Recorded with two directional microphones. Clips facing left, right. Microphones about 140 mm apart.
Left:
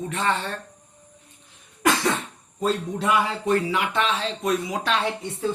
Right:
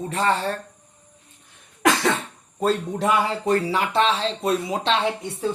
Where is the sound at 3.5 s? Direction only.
35° right (ahead or behind).